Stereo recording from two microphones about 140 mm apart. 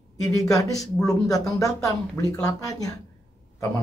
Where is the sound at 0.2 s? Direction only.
25° left (ahead or behind).